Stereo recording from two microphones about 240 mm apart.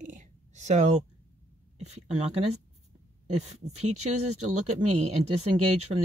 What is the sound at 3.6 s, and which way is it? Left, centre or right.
Speech, right.